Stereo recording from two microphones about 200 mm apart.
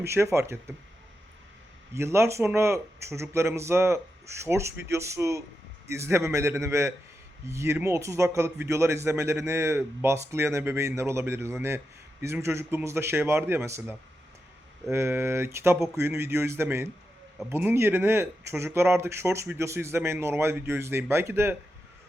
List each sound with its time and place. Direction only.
0.0 s speech: 15° right (ahead or behind)
2.0 s speech: 15° right (ahead or behind)
14.9 s speech: 10° right (ahead or behind)